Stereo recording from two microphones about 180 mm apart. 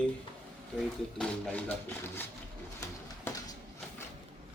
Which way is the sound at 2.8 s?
15° left (ahead or behind).